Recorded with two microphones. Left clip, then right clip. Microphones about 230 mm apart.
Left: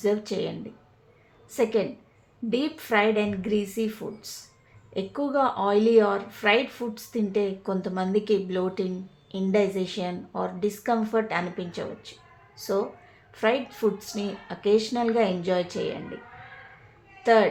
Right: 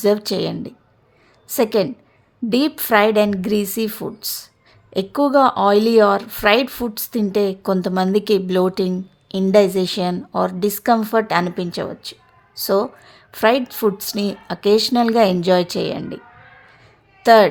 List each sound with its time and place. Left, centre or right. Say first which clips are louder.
0.0 s a woman's voice: right 8 dB; right
17.2 s a woman's voice: right 9 dB; right